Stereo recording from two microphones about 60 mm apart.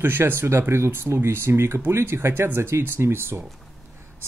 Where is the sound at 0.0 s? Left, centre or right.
Right.